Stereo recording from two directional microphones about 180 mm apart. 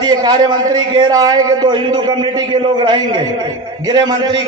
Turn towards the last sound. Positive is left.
turn(degrees=-25)  # may be behind; listen again after turning